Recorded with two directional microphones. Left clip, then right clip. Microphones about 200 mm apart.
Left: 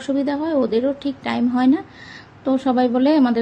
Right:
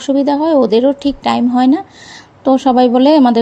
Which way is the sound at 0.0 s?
20° right (ahead or behind).